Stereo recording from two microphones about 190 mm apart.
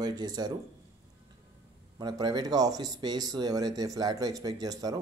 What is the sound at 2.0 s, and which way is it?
Speech, 20° right (ahead or behind).